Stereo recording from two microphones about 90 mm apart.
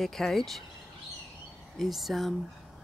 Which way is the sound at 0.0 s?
5° left (ahead or behind).